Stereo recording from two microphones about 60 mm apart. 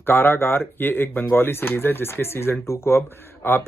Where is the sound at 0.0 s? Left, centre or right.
Left.